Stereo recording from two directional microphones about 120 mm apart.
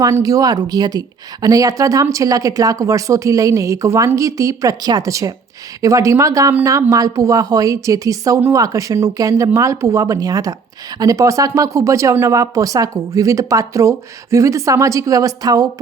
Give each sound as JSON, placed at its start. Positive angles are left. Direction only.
{"t": 0.0, "sound": "a woman's voice", "side_deg": -30}